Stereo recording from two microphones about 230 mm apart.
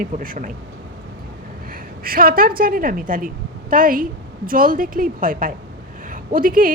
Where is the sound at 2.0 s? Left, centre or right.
Right.